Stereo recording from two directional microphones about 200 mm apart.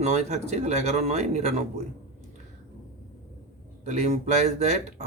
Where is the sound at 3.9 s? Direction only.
35° right (ahead or behind).